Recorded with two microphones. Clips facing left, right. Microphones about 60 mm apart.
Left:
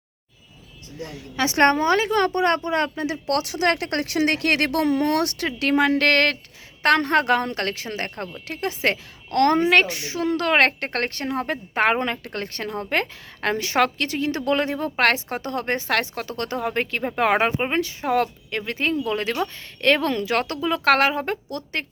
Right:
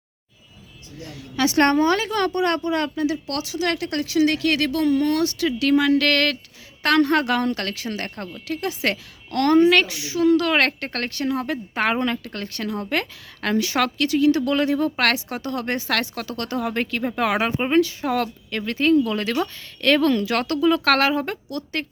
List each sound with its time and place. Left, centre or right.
1.1 s a woman's voice: left
5.5 s a woman's voice: left
9.8 s a woman's voice: left